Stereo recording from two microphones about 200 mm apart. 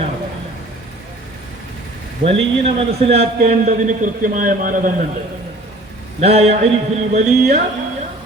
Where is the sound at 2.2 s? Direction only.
30° right (ahead or behind).